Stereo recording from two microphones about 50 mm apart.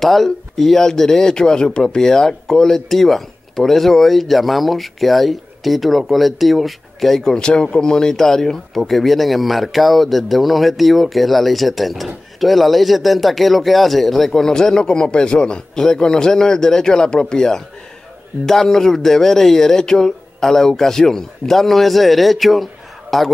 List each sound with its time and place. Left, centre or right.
0.0 s a man's voice: centre